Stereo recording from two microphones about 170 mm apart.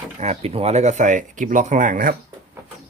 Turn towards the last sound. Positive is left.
turn(degrees=-50)  # may be behind; listen again after turning